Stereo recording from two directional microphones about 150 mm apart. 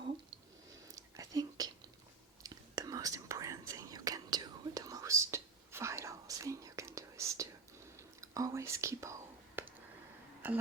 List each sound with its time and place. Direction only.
0.9 s whispering: 20° right (ahead or behind)